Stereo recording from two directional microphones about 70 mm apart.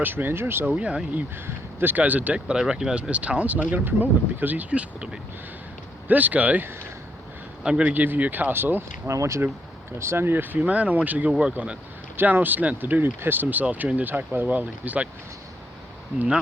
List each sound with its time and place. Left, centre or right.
0.0 s speech: right
0.7 s speech: centre
1.5 s speech: right
2.6 s speech: centre
8.0 s speech: right
9.0 s speech: right
16.1 s speech: centre